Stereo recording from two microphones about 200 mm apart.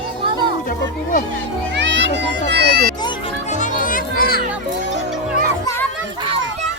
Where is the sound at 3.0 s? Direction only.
25° left (ahead or behind).